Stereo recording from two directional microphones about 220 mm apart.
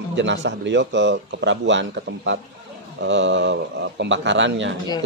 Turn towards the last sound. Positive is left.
turn(degrees=-55)  # may be behind; listen again after turning